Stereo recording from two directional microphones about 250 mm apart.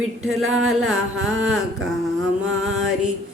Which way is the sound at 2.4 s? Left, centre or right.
Right.